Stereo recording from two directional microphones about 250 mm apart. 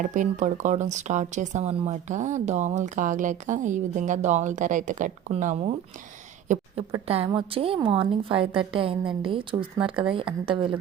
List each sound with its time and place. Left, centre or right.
0.0 s a woman's voice: right